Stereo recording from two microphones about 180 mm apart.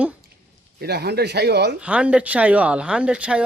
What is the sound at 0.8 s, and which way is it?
Speech, 65° right (ahead or behind).